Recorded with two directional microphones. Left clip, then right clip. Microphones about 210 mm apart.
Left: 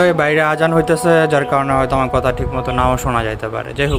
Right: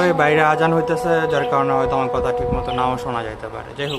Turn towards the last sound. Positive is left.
turn(degrees=15)  # may be behind; listen again after turning